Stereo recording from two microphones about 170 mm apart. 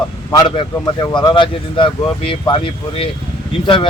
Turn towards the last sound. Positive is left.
turn(degrees=30)  # may be behind; listen again after turning